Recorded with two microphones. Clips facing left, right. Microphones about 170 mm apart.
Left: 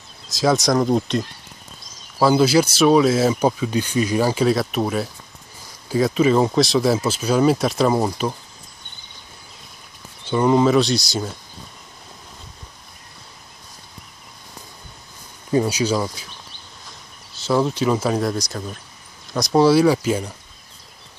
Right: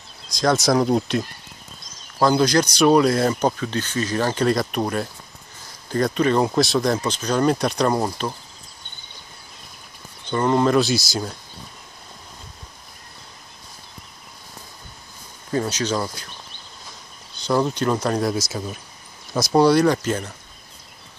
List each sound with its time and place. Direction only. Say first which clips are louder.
0.3 s speech: left 1 dB; 5° left (ahead or behind)
10.2 s speech: left 3 dB; 5° left (ahead or behind)
15.5 s speech: left 4 dB; 10° left (ahead or behind)
17.5 s speech: left 2 dB; 5° left (ahead or behind)